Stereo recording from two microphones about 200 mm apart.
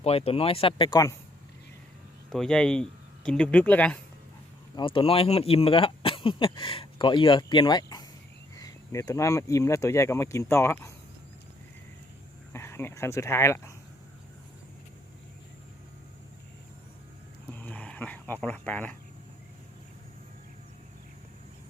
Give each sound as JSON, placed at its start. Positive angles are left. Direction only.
{"t": 0.0, "sound": "speech", "side_deg": 30}
{"t": 2.3, "sound": "speech", "side_deg": 5}
{"t": 4.7, "sound": "speech", "side_deg": 25}
{"t": 12.5, "sound": "speech", "side_deg": 10}
{"t": 17.5, "sound": "dog", "side_deg": 10}